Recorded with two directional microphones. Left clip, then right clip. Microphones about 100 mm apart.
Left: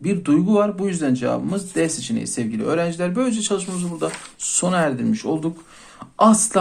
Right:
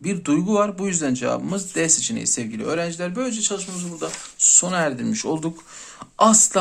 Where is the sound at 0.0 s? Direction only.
35° right (ahead or behind).